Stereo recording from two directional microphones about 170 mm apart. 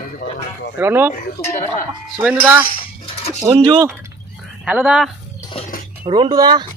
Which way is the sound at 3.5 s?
30° right (ahead or behind).